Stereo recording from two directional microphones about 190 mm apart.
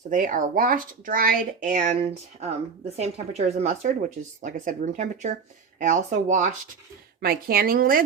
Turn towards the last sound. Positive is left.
turn(degrees=-50)  # may be behind; listen again after turning